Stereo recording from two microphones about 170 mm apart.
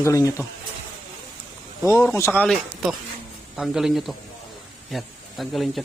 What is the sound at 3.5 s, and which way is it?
Speech, centre (ahead or behind).